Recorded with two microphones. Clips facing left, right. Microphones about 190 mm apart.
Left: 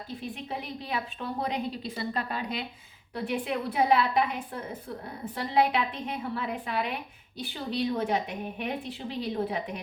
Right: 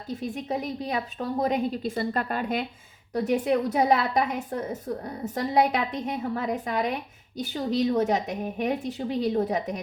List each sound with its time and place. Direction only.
0.1 s a woman's voice: 45° right (ahead or behind)